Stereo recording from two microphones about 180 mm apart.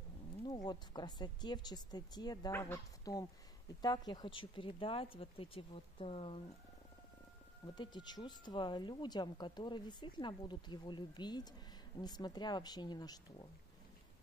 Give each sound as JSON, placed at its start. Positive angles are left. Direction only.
{"t": 0.7, "sound": "speech", "side_deg": 25}
{"t": 7.6, "sound": "speech", "side_deg": 25}